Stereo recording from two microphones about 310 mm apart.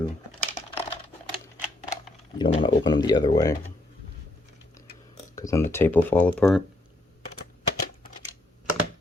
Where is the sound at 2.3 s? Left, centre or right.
Centre.